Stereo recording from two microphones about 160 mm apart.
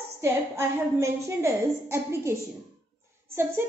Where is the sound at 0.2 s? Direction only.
15° right (ahead or behind).